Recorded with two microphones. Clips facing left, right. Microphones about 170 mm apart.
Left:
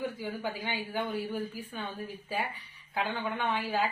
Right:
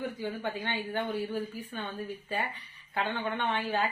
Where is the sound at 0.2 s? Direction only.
5° left (ahead or behind).